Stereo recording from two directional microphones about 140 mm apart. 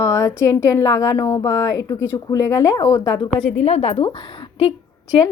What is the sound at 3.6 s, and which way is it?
Speech, 50° left (ahead or behind).